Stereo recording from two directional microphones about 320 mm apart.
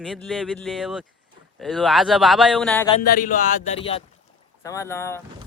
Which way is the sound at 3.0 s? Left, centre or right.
Left.